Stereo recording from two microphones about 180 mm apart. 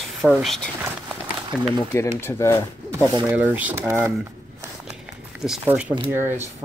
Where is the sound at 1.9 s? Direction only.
15° left (ahead or behind).